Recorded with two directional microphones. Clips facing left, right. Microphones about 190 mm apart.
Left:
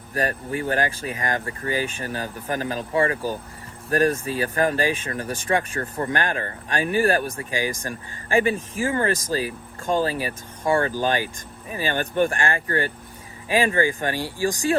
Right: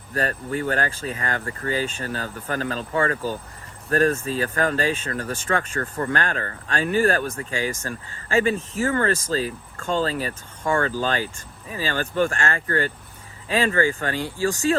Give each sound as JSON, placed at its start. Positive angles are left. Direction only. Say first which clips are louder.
{"t": 0.1, "sound": "speech", "louder": "even", "side_deg": 15}